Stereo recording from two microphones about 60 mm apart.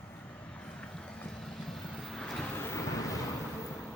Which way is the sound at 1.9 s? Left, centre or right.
Centre.